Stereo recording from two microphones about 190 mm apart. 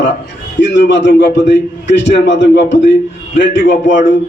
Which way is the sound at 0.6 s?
70° left (ahead or behind).